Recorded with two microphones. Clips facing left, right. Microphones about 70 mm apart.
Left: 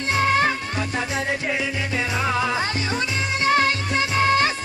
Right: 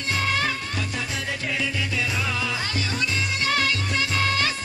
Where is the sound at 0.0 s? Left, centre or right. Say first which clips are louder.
Left 6 dB; left.